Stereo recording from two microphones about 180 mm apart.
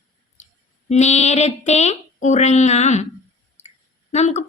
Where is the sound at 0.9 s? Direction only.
40° left (ahead or behind).